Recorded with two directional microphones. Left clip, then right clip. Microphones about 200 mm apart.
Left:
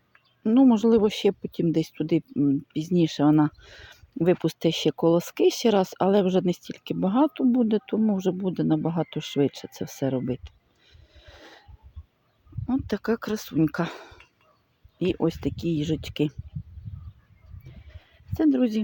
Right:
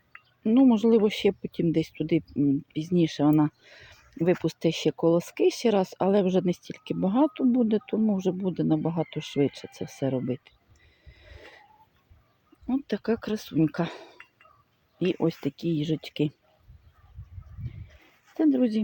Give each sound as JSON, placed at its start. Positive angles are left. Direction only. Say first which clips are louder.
{"t": 0.4, "sound": "speech", "louder": "left 1 dB", "side_deg": 10}
{"t": 11.1, "sound": "a sound", "louder": "left 1 dB", "side_deg": 5}
{"t": 12.6, "sound": "speech", "louder": "left 1 dB", "side_deg": 10}
{"t": 18.3, "sound": "speech", "louder": "left 1 dB", "side_deg": 5}